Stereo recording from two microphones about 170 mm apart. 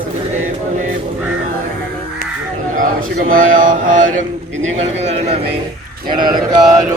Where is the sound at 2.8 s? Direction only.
55° right (ahead or behind).